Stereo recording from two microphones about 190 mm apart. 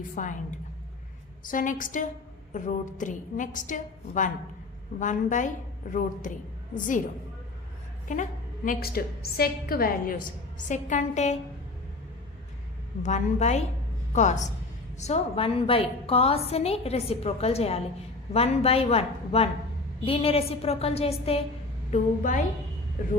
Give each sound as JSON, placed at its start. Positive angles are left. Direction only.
{"t": 0.2, "sound": "a woman's voice", "side_deg": 45}
{"t": 1.5, "sound": "a woman's voice", "side_deg": 45}
{"t": 8.0, "sound": "a woman's voice", "side_deg": 40}
{"t": 13.0, "sound": "a woman's voice", "side_deg": 40}